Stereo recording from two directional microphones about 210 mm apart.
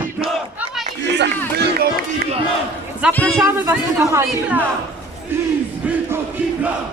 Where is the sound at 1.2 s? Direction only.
50° right (ahead or behind).